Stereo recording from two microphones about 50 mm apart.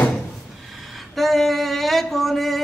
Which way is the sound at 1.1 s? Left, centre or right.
Centre.